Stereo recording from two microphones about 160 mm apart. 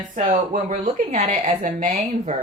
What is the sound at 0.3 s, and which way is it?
A woman's voice, 55° right (ahead or behind).